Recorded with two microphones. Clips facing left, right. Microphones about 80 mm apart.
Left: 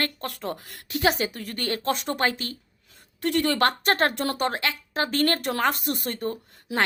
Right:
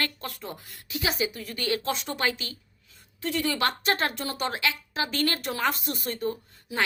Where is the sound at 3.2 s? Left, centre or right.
Left.